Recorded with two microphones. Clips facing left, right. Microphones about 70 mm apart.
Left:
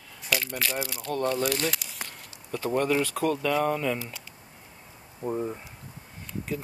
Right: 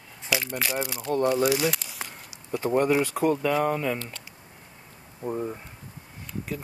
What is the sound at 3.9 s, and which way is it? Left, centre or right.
Speech, centre.